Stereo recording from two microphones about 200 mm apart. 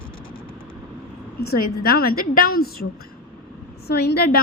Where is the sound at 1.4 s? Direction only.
50° left (ahead or behind).